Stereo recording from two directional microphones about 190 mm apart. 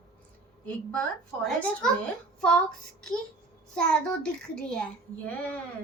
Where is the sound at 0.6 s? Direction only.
5° left (ahead or behind).